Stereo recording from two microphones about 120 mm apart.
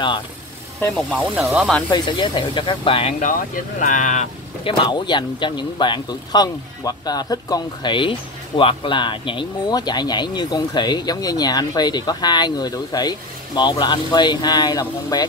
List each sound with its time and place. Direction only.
1.2 s speech: 5° right (ahead or behind)
1.9 s speech: 35° left (ahead or behind)
3.8 s speech: 90° left
4.6 s speech: 40° left (ahead or behind)